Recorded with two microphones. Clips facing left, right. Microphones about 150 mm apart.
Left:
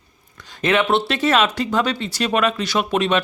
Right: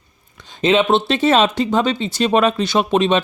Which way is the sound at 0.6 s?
20° right (ahead or behind).